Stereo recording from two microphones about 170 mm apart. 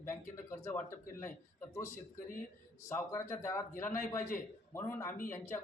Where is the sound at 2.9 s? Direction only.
15° left (ahead or behind).